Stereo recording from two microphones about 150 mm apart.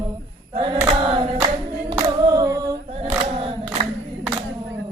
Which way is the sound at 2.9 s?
45° right (ahead or behind).